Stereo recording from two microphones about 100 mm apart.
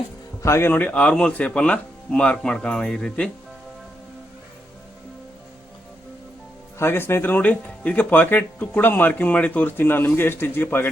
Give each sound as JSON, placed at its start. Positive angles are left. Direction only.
{"t": 0.4, "sound": "speech", "side_deg": 25}
{"t": 6.7, "sound": "speech", "side_deg": 25}